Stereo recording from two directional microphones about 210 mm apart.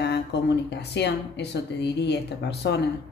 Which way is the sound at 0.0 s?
55° left (ahead or behind).